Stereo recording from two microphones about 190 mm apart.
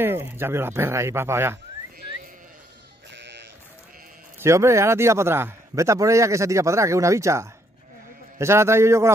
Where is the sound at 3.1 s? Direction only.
65° right (ahead or behind).